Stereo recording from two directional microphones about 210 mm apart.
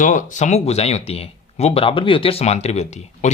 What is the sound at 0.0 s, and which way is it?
Speech, 40° left (ahead or behind).